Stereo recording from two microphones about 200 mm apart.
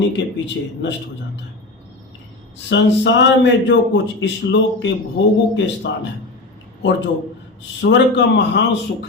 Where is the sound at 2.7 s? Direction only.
65° left (ahead or behind).